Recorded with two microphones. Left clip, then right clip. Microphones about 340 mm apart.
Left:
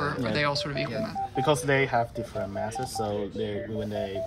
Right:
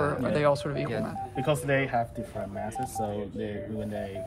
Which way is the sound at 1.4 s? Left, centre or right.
Left.